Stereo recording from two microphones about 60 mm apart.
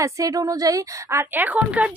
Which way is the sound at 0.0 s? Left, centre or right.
Right.